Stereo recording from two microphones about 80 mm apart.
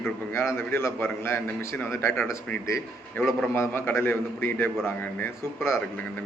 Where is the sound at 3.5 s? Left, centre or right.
Left.